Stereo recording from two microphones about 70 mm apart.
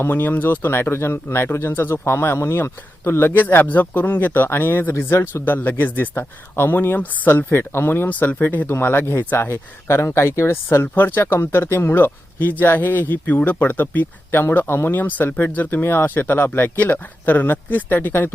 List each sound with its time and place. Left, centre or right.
0.0 s speech: left
3.0 s speech: left
14.5 s speech: left